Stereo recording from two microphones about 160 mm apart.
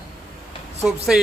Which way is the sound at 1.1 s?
5° right (ahead or behind).